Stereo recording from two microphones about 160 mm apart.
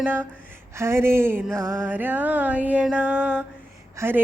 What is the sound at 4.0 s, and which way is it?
Speech, 15° right (ahead or behind).